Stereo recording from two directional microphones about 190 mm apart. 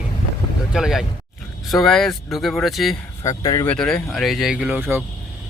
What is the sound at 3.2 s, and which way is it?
Speech, 15° left (ahead or behind).